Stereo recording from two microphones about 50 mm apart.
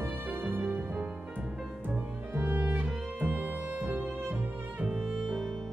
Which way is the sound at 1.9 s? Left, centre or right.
Right.